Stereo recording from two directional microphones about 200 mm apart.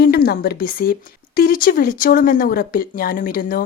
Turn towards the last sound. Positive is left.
turn(degrees=45)  # may be behind; listen again after turning